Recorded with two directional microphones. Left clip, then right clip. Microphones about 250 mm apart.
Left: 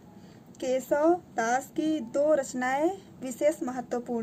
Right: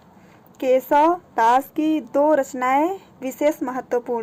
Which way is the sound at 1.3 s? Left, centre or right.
Centre.